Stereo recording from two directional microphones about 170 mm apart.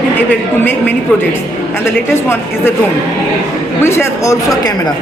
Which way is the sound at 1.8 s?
15° left (ahead or behind).